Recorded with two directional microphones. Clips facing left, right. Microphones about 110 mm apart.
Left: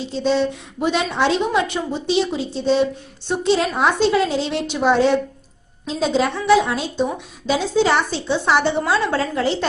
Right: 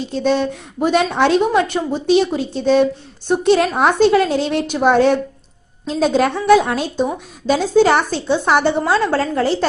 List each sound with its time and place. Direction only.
0.0 s a woman's voice: 50° right (ahead or behind)